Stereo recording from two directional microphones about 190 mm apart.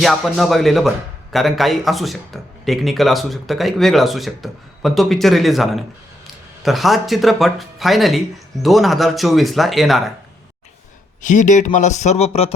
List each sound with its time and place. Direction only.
0.0 s a man's voice: centre (ahead or behind)
11.2 s speech: 40° left (ahead or behind)